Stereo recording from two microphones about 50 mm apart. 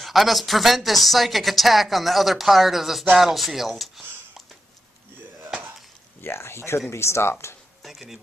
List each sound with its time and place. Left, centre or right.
0.0 s speech: centre
6.2 s speech: left
7.8 s speech: centre